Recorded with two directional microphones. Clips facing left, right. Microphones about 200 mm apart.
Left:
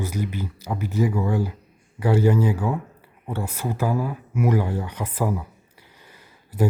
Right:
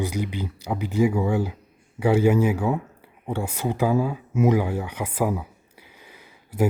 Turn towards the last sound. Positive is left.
turn(degrees=-15)  # may be behind; listen again after turning